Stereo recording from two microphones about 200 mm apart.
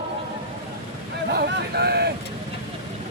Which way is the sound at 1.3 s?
55° right (ahead or behind).